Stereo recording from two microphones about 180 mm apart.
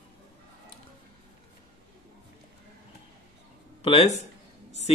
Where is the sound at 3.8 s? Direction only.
35° left (ahead or behind).